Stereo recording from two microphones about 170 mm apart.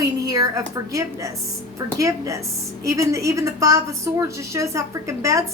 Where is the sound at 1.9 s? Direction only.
20° right (ahead or behind).